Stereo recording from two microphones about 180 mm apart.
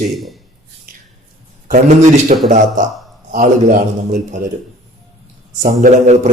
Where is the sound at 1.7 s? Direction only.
50° right (ahead or behind).